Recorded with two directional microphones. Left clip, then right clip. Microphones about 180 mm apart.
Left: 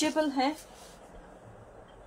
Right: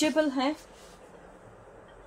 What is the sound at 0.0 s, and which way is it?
Speech, 30° right (ahead or behind).